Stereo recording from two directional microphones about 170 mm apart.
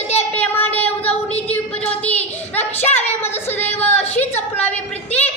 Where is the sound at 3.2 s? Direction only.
15° left (ahead or behind).